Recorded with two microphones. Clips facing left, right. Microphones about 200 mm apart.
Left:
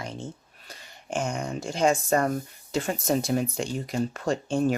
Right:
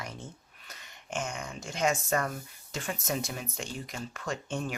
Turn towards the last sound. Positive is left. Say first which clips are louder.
# left 10 dB
turn(degrees=35)  # may be behind; listen again after turning